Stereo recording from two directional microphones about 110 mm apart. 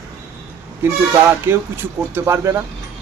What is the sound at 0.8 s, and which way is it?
Speech, 20° right (ahead or behind).